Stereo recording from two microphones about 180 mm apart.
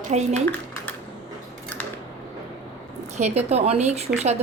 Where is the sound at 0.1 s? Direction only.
40° right (ahead or behind).